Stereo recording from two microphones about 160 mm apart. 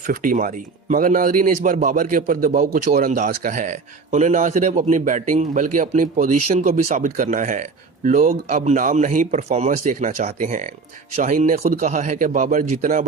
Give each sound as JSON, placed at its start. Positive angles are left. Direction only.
{"t": 0.0, "sound": "speech", "side_deg": -60}